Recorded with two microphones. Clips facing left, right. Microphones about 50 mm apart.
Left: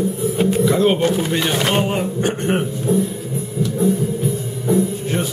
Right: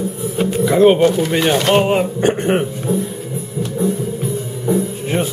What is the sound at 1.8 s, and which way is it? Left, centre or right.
Speech, right.